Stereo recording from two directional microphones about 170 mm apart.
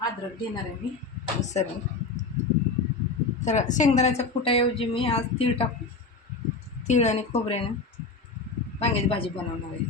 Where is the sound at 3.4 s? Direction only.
45° left (ahead or behind).